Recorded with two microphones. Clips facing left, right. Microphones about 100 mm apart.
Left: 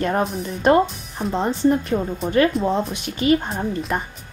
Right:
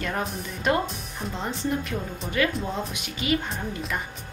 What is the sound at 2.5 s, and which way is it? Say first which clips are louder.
Speech: left 9 dB; centre (ahead or behind).